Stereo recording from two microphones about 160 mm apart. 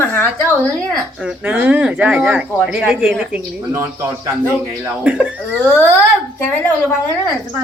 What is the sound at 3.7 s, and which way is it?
Speech, 15° right (ahead or behind).